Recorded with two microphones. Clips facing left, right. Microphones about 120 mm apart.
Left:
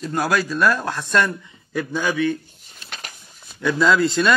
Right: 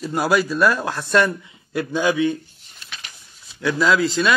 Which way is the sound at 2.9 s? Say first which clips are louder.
Left 3 dB; 45° left (ahead or behind).